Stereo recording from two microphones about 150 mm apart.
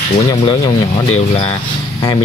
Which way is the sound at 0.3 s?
30° left (ahead or behind).